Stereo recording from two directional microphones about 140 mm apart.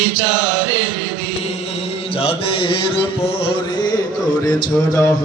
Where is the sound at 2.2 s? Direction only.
40° left (ahead or behind).